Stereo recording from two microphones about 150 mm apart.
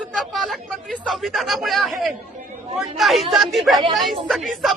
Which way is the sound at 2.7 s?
Centre (ahead or behind).